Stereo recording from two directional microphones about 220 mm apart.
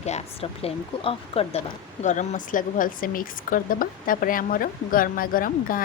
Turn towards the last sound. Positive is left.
turn(degrees=40)  # may be behind; listen again after turning